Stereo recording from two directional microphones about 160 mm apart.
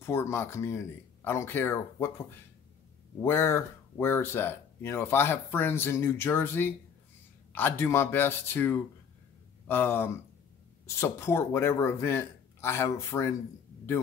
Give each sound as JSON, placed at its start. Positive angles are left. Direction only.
{"t": 0.0, "sound": "speech", "side_deg": 15}
{"t": 3.2, "sound": "speech", "side_deg": 15}